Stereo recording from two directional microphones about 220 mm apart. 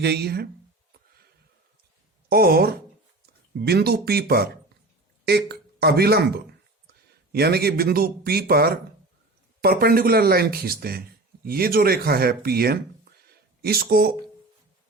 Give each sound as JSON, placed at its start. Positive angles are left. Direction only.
{"t": 0.0, "sound": "speech", "side_deg": -50}
{"t": 2.3, "sound": "speech", "side_deg": -45}